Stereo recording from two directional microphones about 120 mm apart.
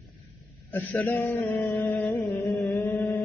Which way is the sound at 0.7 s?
15° left (ahead or behind).